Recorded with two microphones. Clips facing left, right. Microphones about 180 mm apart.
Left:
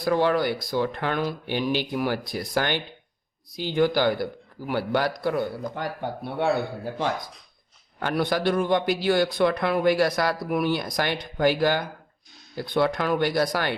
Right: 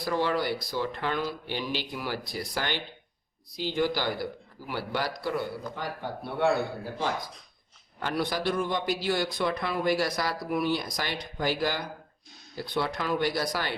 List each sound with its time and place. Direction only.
0.0 s a man's voice: 55° left (ahead or behind)
7.9 s a man's voice: 55° left (ahead or behind)